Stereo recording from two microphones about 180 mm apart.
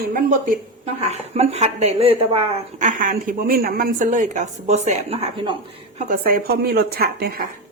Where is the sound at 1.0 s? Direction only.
35° right (ahead or behind).